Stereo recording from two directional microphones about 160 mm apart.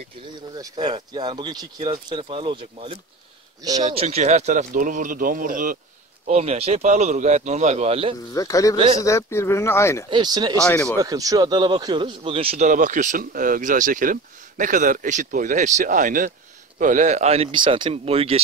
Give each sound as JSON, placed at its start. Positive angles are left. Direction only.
{"t": 0.7, "sound": "speech", "side_deg": -30}
{"t": 3.8, "sound": "speech", "side_deg": -40}
{"t": 6.2, "sound": "speech", "side_deg": -45}
{"t": 8.3, "sound": "speech", "side_deg": 20}
{"t": 8.7, "sound": "speech", "side_deg": -35}
{"t": 9.0, "sound": "speech", "side_deg": 15}
{"t": 10.0, "sound": "speech", "side_deg": -30}
{"t": 10.6, "sound": "speech", "side_deg": 10}
{"t": 11.0, "sound": "speech", "side_deg": -20}
{"t": 12.6, "sound": "speech", "side_deg": -55}